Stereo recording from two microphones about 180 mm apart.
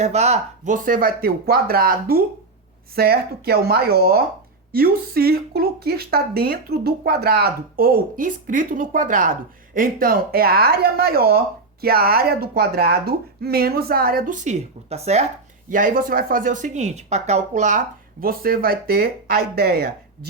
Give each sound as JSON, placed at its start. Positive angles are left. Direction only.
{"t": 0.0, "sound": "speech", "side_deg": -35}
{"t": 15.7, "sound": "speech", "side_deg": -50}